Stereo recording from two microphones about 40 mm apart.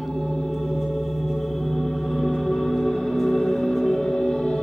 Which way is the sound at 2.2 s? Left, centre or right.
Centre.